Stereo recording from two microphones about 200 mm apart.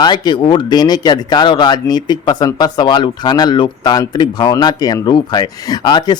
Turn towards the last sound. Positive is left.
turn(degrees=20)  # may be behind; listen again after turning